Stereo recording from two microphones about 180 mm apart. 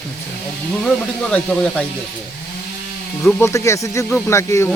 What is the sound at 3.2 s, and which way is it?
Speech, 10° left (ahead or behind).